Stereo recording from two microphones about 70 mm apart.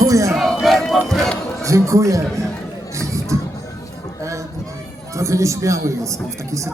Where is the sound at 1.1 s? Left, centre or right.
Centre.